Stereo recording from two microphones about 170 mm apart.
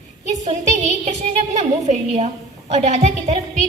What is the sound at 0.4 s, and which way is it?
A woman's voice, 45° right (ahead or behind).